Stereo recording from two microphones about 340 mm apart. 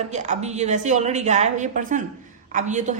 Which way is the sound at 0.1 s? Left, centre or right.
Right.